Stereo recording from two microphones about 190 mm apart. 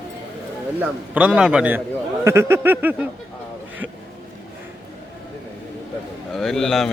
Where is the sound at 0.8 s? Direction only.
5° right (ahead or behind).